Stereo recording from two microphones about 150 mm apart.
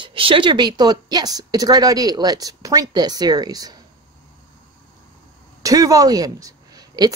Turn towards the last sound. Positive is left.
turn(degrees=-25)  # may be behind; listen again after turning